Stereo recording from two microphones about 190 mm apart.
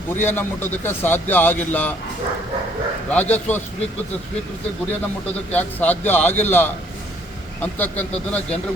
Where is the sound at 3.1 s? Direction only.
10° left (ahead or behind).